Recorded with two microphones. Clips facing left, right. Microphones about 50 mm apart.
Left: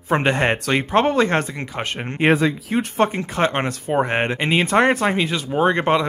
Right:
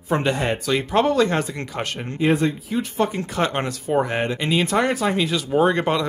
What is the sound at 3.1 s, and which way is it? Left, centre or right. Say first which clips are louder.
Speech: left 2 dB; left.